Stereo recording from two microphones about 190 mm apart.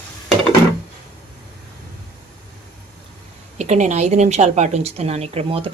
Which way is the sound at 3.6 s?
40° right (ahead or behind).